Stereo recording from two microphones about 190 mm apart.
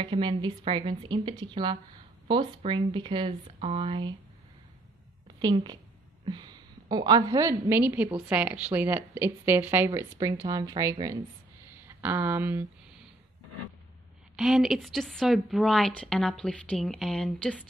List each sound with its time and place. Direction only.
0.0 s speech: 25° right (ahead or behind)
5.4 s a woman's voice: 25° right (ahead or behind)
14.3 s a woman's voice: centre (ahead or behind)